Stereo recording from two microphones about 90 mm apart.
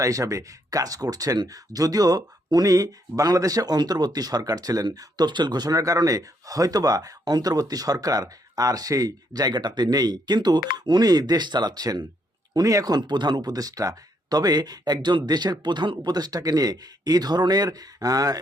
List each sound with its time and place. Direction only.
0.0 s speech: 40° right (ahead or behind)